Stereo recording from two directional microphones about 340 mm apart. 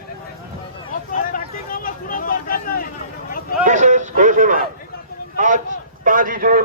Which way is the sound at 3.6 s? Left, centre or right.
Right.